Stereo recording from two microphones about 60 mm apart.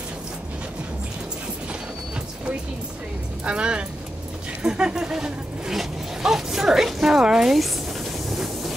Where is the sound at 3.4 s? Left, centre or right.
Centre.